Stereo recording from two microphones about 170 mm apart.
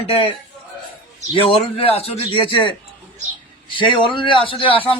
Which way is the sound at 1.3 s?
35° left (ahead or behind).